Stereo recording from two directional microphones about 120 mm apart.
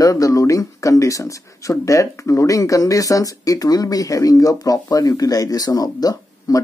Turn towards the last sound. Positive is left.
turn(degrees=30)  # may be behind; listen again after turning